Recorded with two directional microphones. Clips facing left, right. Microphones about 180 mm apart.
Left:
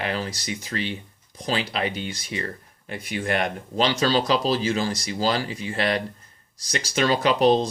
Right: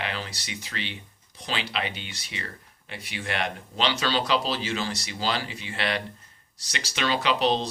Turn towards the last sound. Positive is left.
turn(degrees=45)  # may be behind; listen again after turning